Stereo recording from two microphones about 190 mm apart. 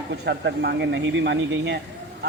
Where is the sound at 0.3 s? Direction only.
65° right (ahead or behind).